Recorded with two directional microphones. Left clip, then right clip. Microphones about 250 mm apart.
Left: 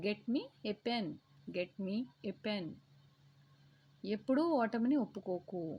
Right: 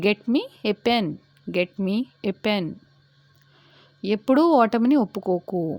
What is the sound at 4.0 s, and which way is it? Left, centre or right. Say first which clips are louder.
A woman's voice: right 15 dB; right.